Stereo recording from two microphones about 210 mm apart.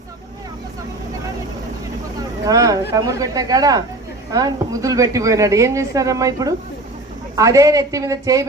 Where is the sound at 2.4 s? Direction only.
15° right (ahead or behind).